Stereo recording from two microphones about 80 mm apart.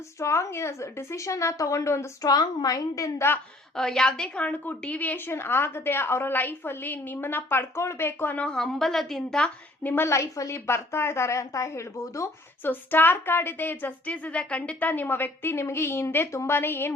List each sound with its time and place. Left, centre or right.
0.2 s a woman's voice: left
2.2 s a woman's voice: left
3.2 s a woman's voice: left
3.8 s a woman's voice: centre; by 8.4 s left
8.5 s a woman's voice: centre
9.8 s a woman's voice: left
12.6 s a woman's voice: left